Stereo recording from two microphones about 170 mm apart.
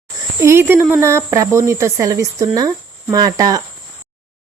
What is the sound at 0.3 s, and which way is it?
Speech, 15° right (ahead or behind).